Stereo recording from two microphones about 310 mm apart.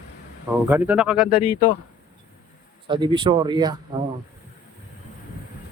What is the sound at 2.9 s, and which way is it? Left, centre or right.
Speech, centre.